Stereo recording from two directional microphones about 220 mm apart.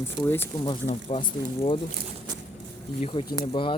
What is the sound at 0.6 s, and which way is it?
Speech, 25° left (ahead or behind).